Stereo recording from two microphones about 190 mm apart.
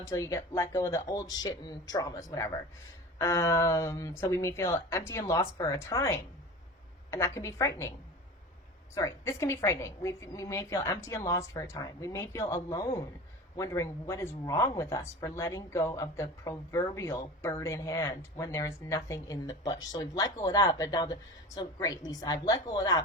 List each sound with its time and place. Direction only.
0.1 s speech: 15° left (ahead or behind)
9.0 s a woman's voice: 15° left (ahead or behind)